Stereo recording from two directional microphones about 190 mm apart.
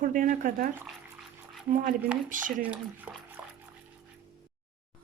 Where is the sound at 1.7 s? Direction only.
45° right (ahead or behind).